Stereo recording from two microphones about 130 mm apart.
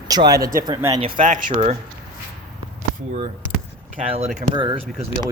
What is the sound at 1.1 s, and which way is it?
Speech, 90° right.